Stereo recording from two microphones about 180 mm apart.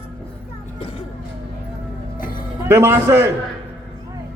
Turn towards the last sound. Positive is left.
turn(degrees=-10)  # may be behind; listen again after turning